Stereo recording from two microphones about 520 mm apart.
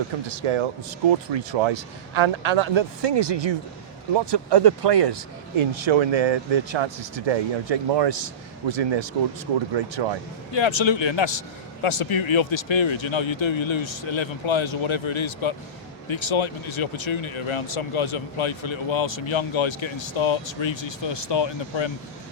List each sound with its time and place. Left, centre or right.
0.3 s speech: right
5.7 s speech: right
10.5 s speech: left